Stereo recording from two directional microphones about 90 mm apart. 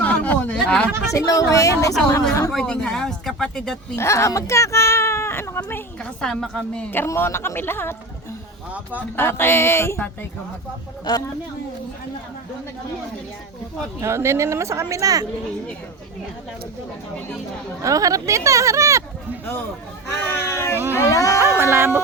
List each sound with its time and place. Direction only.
0.0 s a sound: 15° left (ahead or behind)
1.1 s speech: 40° left (ahead or behind)
2.5 s speech: 10° left (ahead or behind)
3.9 s speech: 35° left (ahead or behind)
6.0 s speech: 10° left (ahead or behind)
6.9 s speech: 25° left (ahead or behind)
8.7 s speech: 15° right (ahead or behind)
9.1 s speech: 25° left (ahead or behind)
11.1 s speech: 50° left (ahead or behind)
14.0 s speech: 30° right (ahead or behind)
17.8 s speech: 40° right (ahead or behind)
20.2 s speech: 25° left (ahead or behind)
20.9 s a sound: 35° left (ahead or behind)
21.4 s speech: 25° right (ahead or behind)